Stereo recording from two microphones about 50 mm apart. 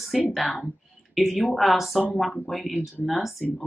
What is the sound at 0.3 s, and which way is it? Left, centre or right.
A woman's voice, centre.